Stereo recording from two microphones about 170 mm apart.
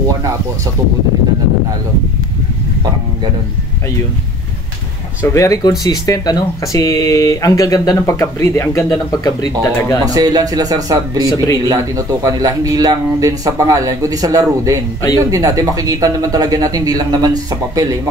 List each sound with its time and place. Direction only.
5.2 s speech: 15° left (ahead or behind)
10.0 s speech: 20° right (ahead or behind)